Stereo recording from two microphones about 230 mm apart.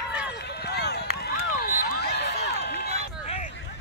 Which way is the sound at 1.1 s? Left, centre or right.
Left.